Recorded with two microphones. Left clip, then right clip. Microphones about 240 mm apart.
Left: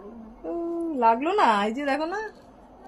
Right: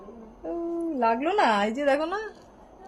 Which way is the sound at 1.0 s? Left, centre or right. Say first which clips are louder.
Left 3 dB; centre.